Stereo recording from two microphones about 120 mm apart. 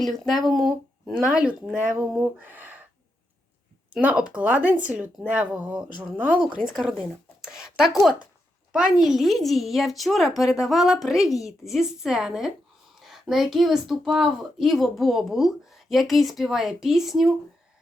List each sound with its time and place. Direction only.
0.0 s speech: centre (ahead or behind); by 2.8 s 15° right (ahead or behind)
4.0 s speech: 10° right (ahead or behind)
7.4 s a sound: 5° right (ahead or behind)
9.0 s speech: 5° right (ahead or behind)